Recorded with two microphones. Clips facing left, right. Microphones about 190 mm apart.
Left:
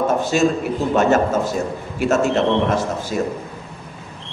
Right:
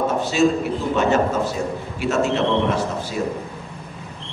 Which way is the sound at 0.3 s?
50° left (ahead or behind).